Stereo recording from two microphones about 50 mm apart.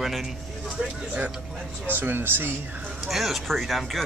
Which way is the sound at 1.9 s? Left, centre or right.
Right.